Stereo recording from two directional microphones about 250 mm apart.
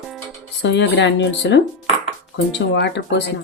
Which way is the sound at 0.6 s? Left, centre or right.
Left.